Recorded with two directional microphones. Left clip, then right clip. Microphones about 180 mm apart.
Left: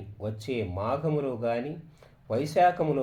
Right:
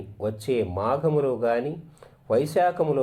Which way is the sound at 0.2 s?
15° right (ahead or behind).